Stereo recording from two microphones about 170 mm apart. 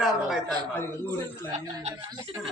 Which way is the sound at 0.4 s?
25° right (ahead or behind).